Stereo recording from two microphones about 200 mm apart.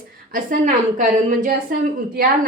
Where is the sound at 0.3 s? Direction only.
40° right (ahead or behind).